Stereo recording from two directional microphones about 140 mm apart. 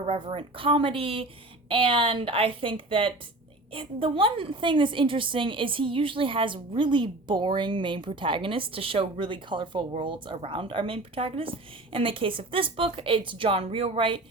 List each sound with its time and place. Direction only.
0.0 s a woman's voice: 45° right (ahead or behind)